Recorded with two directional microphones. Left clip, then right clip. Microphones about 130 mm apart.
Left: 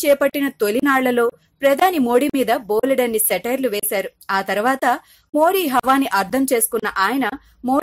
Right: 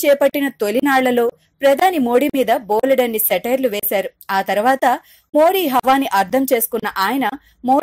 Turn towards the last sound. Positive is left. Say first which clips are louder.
# right 5 dB
turn(degrees=0)  # may be behind; listen again after turning